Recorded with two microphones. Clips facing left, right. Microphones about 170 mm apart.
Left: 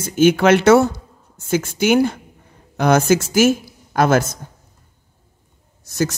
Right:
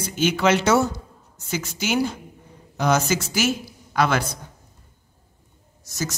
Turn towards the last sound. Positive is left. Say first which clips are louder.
# left 9 dB
turn(degrees=60)  # may be behind; listen again after turning